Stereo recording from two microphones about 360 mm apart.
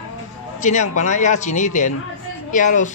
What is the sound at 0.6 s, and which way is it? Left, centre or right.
A man's voice, centre.